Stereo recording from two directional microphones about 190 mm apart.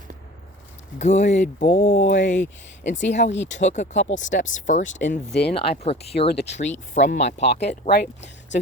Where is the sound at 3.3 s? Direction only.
75° left (ahead or behind).